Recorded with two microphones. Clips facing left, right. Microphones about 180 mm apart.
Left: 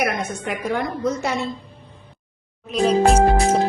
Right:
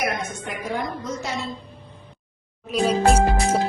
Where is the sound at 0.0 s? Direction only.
65° left (ahead or behind).